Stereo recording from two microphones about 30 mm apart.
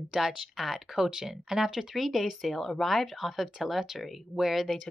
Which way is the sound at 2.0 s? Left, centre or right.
Centre.